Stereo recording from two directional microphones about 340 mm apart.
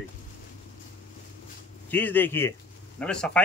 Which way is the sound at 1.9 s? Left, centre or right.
Centre.